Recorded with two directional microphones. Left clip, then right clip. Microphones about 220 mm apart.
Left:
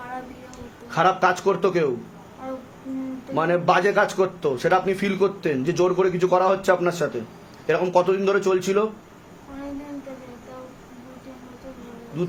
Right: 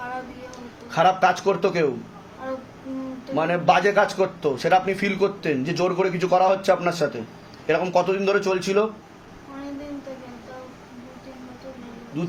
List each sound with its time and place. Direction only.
0.9 s speech: 25° left (ahead or behind)
3.3 s a man's voice: 25° left (ahead or behind)